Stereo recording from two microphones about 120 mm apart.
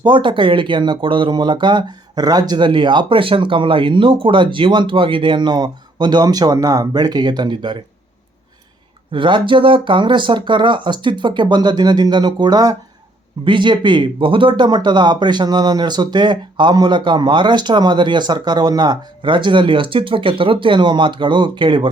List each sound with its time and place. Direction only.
0.0 s speech: 40° right (ahead or behind)
9.1 s speech: 45° right (ahead or behind)